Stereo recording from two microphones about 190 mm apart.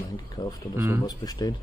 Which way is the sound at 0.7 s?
15° right (ahead or behind).